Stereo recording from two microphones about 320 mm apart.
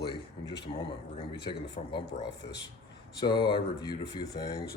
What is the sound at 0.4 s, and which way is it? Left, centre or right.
Speech, centre.